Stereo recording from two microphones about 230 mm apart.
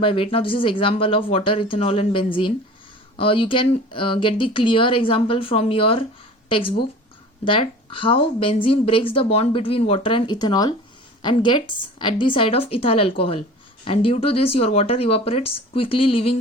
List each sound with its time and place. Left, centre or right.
0.0 s speech: left